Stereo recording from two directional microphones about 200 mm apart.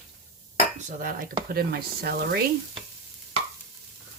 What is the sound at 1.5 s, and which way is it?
Speech, 50° right (ahead or behind).